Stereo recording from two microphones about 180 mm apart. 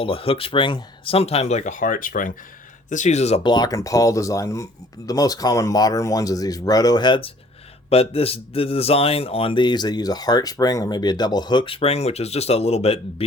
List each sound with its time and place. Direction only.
0.0 s speech: 30° left (ahead or behind)